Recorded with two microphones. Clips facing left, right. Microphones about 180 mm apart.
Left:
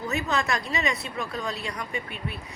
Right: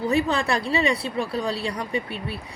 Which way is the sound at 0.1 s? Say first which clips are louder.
Right 4 dB; 30° right (ahead or behind).